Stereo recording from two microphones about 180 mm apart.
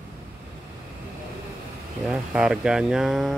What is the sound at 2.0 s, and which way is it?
Speech, 5° right (ahead or behind).